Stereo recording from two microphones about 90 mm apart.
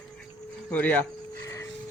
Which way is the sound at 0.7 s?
15° left (ahead or behind).